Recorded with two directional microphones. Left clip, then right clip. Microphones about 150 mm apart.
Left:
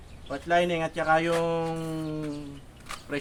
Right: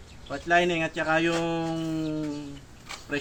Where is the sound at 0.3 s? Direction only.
20° left (ahead or behind).